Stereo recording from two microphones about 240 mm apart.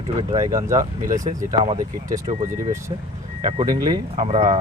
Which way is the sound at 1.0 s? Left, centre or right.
Right.